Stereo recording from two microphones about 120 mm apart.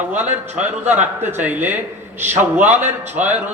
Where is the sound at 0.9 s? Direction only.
15° right (ahead or behind).